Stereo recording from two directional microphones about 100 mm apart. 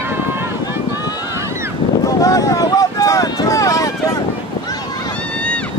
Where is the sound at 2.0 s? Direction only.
35° left (ahead or behind).